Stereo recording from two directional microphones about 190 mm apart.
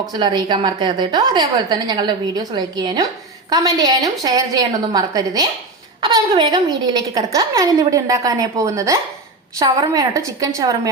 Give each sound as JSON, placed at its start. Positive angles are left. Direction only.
{"t": 0.1, "sound": "a woman's voice", "side_deg": -20}